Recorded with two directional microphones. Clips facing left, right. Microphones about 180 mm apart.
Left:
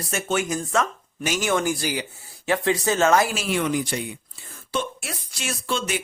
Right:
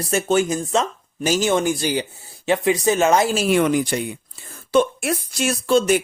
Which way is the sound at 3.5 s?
55° right (ahead or behind).